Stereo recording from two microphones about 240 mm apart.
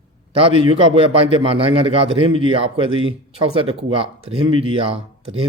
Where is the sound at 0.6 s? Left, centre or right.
Right.